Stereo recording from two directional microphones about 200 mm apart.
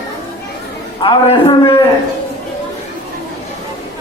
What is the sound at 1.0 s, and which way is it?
Speech, 25° left (ahead or behind).